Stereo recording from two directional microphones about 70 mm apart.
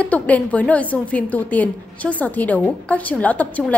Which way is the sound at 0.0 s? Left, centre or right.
Left.